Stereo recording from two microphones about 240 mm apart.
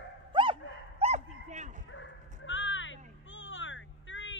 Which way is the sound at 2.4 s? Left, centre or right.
Left.